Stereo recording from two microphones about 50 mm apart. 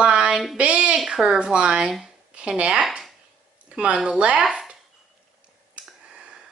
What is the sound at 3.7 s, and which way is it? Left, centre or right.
Speech, right.